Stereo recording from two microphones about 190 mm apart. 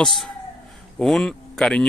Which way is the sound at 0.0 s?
Centre (ahead or behind).